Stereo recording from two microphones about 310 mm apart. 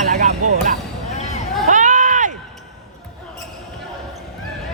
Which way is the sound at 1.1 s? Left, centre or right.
Left.